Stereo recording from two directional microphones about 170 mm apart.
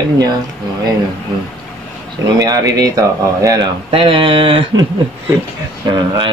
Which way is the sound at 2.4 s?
20° right (ahead or behind).